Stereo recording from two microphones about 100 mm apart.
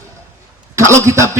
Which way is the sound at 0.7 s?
30° right (ahead or behind).